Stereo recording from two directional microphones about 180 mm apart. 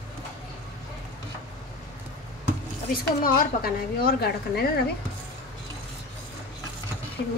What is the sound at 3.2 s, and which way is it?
Speech, 55° left (ahead or behind).